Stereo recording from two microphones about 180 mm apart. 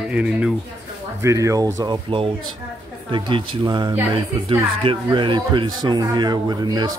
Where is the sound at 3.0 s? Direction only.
25° right (ahead or behind).